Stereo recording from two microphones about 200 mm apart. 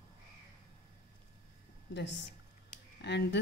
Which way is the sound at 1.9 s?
60° left (ahead or behind).